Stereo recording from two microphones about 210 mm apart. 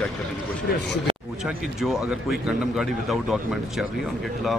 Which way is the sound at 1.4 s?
Centre (ahead or behind).